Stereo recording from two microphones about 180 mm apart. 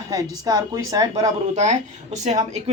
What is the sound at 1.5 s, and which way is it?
Speech, 40° right (ahead or behind).